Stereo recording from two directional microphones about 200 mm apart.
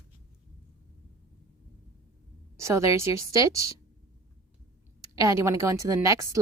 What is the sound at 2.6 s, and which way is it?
A woman's voice, 15° right (ahead or behind).